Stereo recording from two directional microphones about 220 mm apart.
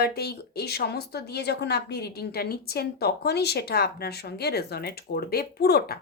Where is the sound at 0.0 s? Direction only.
45° left (ahead or behind).